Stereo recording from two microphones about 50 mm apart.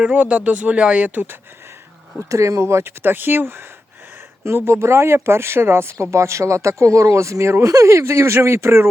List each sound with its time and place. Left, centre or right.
0.1 s speech: right
2.3 s speech: right